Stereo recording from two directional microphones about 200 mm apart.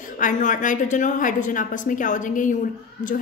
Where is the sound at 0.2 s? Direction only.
40° left (ahead or behind).